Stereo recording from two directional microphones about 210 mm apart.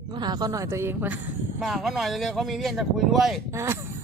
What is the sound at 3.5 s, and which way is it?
Speech, 10° right (ahead or behind).